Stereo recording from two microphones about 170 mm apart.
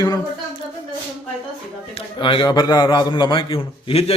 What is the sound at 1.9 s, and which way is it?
A man's voice, 30° left (ahead or behind).